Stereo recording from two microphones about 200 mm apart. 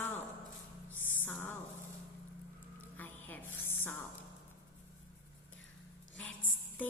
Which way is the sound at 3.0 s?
10° left (ahead or behind).